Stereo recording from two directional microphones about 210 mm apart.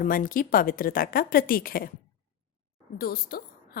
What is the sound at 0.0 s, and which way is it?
A woman's voice, 40° left (ahead or behind).